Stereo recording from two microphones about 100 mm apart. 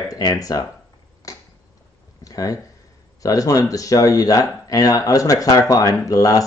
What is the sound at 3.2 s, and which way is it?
Speech, 35° left (ahead or behind).